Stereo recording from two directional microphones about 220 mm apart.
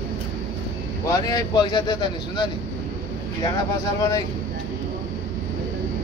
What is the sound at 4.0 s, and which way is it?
Speech, 15° left (ahead or behind).